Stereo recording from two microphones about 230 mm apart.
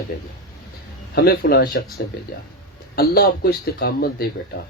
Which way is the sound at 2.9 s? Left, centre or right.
Left.